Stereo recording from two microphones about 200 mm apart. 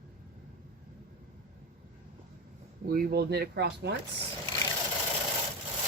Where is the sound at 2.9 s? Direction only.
50° right (ahead or behind).